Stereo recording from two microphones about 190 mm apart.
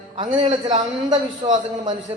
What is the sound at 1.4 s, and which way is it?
Speech, 35° right (ahead or behind).